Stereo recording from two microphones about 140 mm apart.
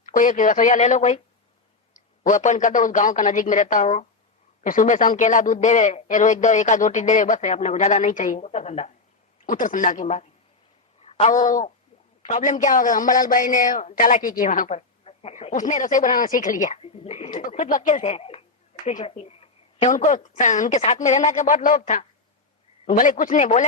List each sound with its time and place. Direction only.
0.0 s a man's voice: 70° left (ahead or behind)
2.2 s a man's voice: 60° left (ahead or behind)
9.5 s a man's voice: 70° left (ahead or behind)
11.0 s a woman's voice: 45° left (ahead or behind); by 16.8 s 65° left (ahead or behind)
16.8 s speech: 45° left (ahead or behind)
18.9 s a sound: 45° left (ahead or behind)
19.9 s a man's voice: 65° left (ahead or behind)